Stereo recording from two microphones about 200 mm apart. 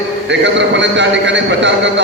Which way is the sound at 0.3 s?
60° right (ahead or behind).